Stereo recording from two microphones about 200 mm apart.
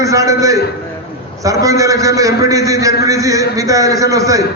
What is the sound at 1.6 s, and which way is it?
A man's voice, 15° right (ahead or behind).